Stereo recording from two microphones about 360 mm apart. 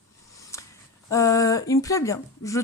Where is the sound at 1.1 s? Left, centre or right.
Centre.